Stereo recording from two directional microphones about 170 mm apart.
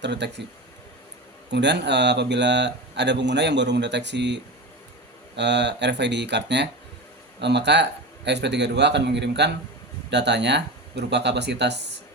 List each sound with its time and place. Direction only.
0.0 s a man's voice: 90° right
1.5 s a man's voice: 90° right
5.4 s a man's voice: 90° right